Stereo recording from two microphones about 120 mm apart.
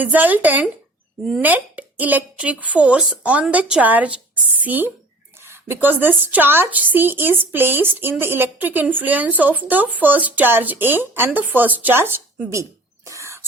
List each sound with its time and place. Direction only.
0.0 s speech: 15° right (ahead or behind)
13.1 s whispering: 25° right (ahead or behind)